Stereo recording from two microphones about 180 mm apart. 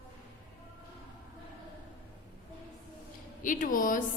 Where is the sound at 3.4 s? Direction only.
45° left (ahead or behind).